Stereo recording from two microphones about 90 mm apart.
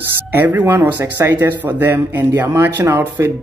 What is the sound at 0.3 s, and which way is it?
Speech, 20° right (ahead or behind).